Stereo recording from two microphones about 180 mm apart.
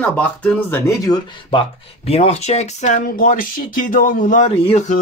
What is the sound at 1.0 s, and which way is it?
Speech, 25° left (ahead or behind).